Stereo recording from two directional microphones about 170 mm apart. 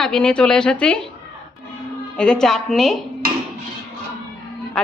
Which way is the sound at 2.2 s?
5° left (ahead or behind).